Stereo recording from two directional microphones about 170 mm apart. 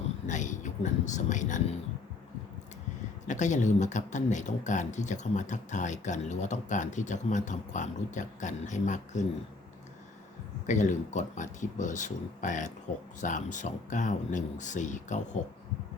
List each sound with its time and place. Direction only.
0.3 s speech: 45° left (ahead or behind)
3.2 s speech: 45° left (ahead or behind)
10.7 s speech: 45° left (ahead or behind)